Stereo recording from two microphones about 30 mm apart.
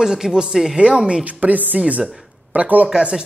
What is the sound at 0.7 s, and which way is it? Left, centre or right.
Speech, right.